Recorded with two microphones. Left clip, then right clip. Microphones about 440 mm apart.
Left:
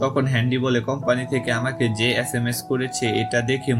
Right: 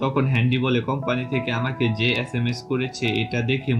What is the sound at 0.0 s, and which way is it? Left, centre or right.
Speech, centre.